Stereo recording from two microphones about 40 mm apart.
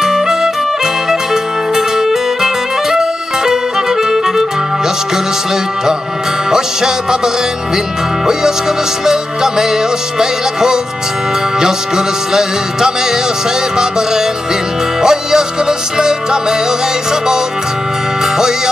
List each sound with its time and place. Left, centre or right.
0.0 s music: centre
6.5 s music: centre
9.0 s music: centre
13.7 s music: centre